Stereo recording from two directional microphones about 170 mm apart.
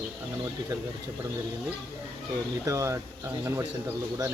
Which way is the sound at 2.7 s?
15° right (ahead or behind).